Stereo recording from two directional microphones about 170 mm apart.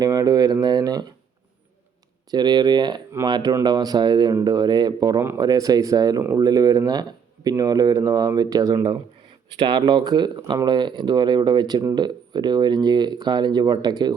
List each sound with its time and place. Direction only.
0.0 s speech: 20° right (ahead or behind)
2.3 s speech: 25° right (ahead or behind)